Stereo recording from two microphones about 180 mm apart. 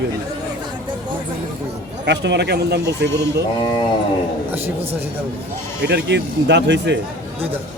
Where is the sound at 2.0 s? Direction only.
75° right (ahead or behind).